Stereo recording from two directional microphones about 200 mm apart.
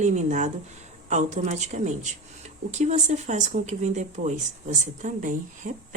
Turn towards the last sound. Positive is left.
turn(degrees=-40)  # may be behind; listen again after turning